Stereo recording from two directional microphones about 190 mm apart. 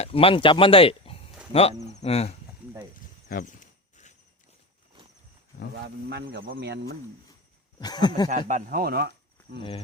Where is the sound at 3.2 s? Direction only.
45° left (ahead or behind).